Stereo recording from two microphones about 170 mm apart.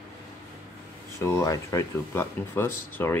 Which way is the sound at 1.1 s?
20° left (ahead or behind).